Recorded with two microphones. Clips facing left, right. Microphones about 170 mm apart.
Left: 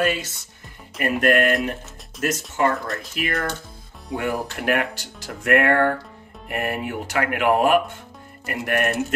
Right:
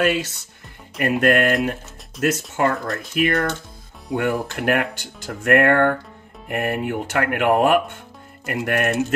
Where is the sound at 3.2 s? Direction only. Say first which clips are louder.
Right 7 dB; 45° right (ahead or behind).